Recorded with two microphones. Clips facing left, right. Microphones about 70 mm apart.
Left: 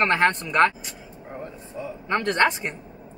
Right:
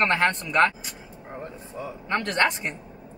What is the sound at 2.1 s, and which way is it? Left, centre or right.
Speech, left.